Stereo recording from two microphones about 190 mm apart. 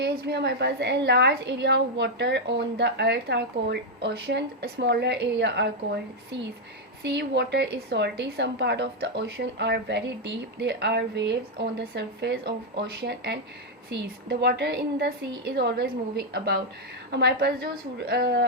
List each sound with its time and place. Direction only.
0.0 s a woman's voice: 60° right (ahead or behind)
7.0 s a woman's voice: 65° right (ahead or behind)